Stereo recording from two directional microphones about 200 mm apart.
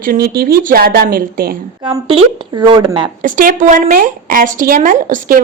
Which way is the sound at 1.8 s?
25° right (ahead or behind).